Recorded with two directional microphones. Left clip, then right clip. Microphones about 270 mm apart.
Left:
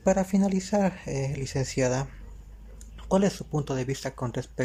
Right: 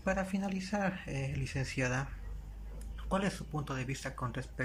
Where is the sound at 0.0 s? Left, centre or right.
Centre.